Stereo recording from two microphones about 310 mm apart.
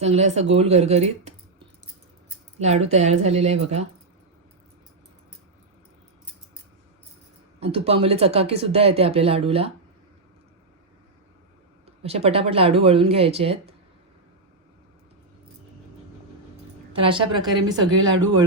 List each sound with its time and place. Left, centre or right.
0.0 s speech: right
7.6 s speech: centre
12.0 s speech: centre
16.9 s speech: centre